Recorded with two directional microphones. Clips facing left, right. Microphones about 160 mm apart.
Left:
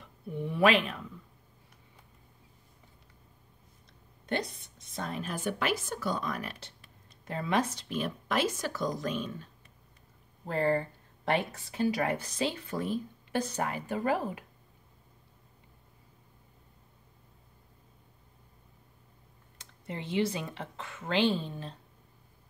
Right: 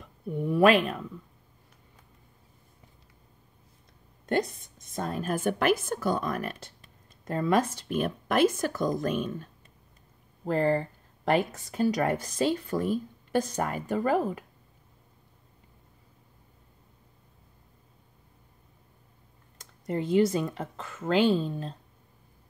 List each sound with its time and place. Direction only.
0.4 s speech: 45° right (ahead or behind)
4.3 s speech: 45° right (ahead or behind)
10.4 s speech: 35° right (ahead or behind)
19.6 s speech: 45° right (ahead or behind)